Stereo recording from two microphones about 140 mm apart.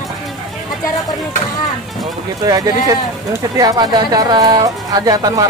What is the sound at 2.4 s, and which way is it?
Speech, 25° right (ahead or behind).